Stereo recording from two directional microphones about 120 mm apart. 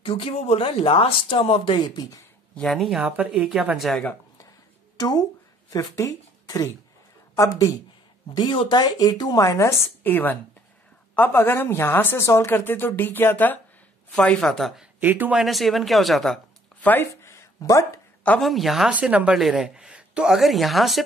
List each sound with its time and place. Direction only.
0.0 s speech: 50° left (ahead or behind)
2.5 s a woman's voice: 5° left (ahead or behind)
4.9 s a woman's voice: 35° left (ahead or behind); by 14.9 s centre (ahead or behind)
15.0 s speech: 15° right (ahead or behind)
15.3 s a woman's voice: centre (ahead or behind)
16.8 s speech: 20° left (ahead or behind)
18.4 s a woman's voice: centre (ahead or behind)